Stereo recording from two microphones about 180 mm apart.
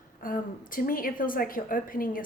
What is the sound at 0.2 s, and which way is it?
A woman's voice, 50° left (ahead or behind).